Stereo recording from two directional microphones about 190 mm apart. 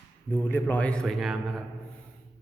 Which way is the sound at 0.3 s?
10° left (ahead or behind).